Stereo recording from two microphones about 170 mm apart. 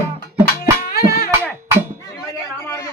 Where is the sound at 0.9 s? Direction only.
65° left (ahead or behind).